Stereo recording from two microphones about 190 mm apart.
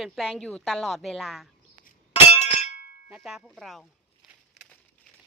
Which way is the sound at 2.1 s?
35° left (ahead or behind).